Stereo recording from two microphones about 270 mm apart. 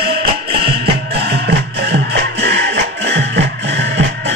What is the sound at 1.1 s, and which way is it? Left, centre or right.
Music, right.